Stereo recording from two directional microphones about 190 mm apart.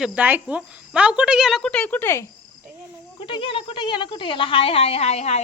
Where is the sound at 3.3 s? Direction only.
25° left (ahead or behind).